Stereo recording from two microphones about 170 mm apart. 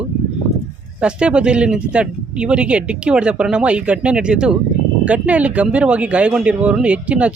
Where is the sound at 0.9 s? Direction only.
5° right (ahead or behind).